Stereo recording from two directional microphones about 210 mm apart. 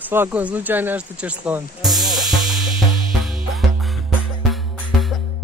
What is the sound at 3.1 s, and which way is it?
Music, centre (ahead or behind).